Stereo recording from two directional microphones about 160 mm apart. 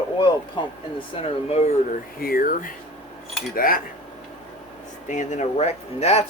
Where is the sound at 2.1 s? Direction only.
65° left (ahead or behind).